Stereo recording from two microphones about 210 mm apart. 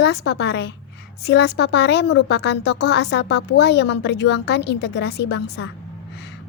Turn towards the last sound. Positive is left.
turn(degrees=55)  # may be behind; listen again after turning